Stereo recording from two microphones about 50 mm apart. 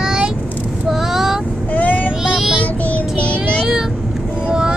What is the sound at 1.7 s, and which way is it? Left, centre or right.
Child singing, left.